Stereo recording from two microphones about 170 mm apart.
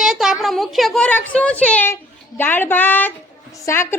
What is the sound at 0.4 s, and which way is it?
A woman's voice, centre (ahead or behind).